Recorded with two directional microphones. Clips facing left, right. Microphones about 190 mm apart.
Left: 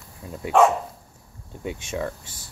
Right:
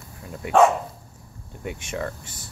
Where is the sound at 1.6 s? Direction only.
15° left (ahead or behind).